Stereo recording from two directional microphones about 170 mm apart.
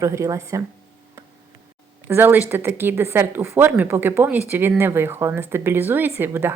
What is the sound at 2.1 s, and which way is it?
Speech, 15° right (ahead or behind).